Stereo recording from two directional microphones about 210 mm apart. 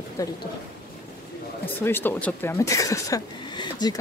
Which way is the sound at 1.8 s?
10° left (ahead or behind).